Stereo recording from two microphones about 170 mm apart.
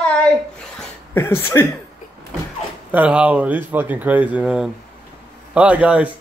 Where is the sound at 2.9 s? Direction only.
5° right (ahead or behind).